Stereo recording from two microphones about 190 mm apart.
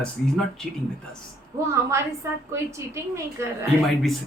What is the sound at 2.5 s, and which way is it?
Speech, 15° right (ahead or behind).